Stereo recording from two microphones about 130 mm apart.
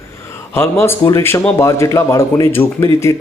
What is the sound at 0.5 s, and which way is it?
A man's voice, 20° left (ahead or behind).